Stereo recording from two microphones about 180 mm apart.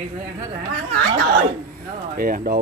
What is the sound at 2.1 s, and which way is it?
Speech, 55° right (ahead or behind).